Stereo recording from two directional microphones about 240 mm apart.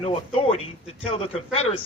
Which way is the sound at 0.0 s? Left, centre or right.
Left.